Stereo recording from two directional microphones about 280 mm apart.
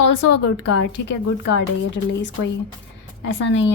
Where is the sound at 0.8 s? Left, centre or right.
Left.